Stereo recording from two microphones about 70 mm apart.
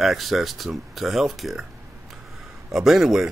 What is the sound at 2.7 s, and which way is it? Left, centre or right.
Speech, centre.